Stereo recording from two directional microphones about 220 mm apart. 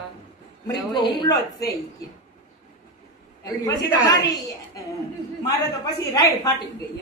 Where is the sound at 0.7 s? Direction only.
20° left (ahead or behind).